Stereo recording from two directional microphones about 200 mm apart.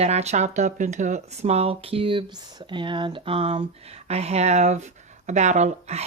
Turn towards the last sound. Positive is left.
turn(degrees=-35)  # may be behind; listen again after turning